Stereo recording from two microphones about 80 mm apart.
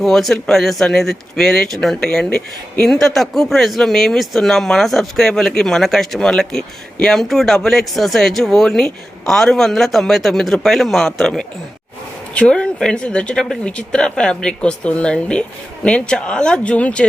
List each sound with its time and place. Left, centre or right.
0.0 s speech: centre